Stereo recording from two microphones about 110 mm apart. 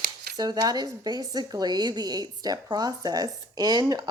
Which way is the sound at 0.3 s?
35° right (ahead or behind).